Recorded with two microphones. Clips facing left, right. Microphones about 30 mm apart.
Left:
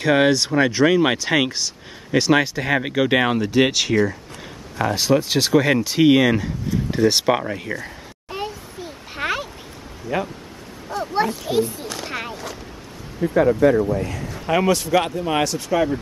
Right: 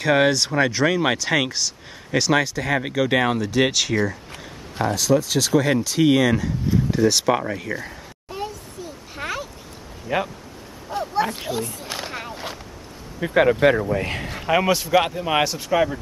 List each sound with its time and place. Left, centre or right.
0.0 s speech: centre
4.9 s speech: left; by 7.7 s centre
8.3 s a sound: left
10.0 s speech: right
12.1 s a sound: left
13.2 s a man's voice: right
13.7 s a man's voice: right
14.4 s speech: centre